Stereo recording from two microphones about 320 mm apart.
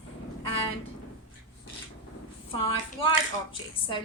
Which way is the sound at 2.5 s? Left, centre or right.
Centre.